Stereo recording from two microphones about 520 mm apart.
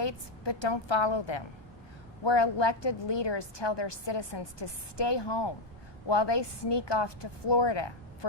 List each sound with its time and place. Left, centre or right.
0.0 s a woman's voice: left